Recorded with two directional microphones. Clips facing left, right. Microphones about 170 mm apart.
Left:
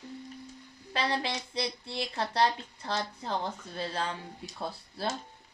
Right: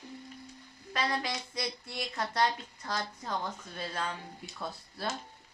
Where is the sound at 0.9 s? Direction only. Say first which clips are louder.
Left 2 dB; 30° left (ahead or behind).